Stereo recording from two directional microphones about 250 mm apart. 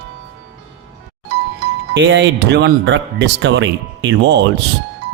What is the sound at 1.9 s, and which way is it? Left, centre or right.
A man's voice, right.